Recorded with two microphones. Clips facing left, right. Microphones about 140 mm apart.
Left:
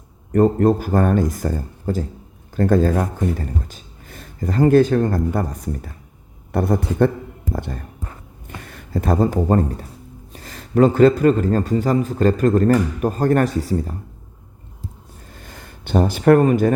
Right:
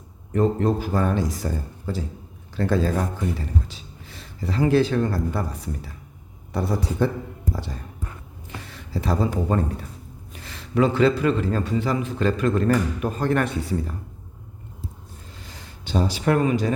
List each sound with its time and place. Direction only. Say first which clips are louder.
0.3 s a man's voice: left 6 dB; 50° left (ahead or behind)
15.4 s speech: left 5 dB; 50° left (ahead or behind)